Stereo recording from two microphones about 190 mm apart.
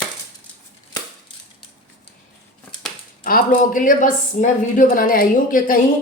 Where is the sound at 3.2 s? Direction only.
45° left (ahead or behind).